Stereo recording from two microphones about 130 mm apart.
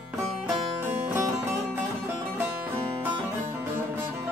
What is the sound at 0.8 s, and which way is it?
Music, 20° right (ahead or behind).